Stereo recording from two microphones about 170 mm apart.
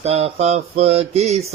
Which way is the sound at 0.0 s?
40° right (ahead or behind).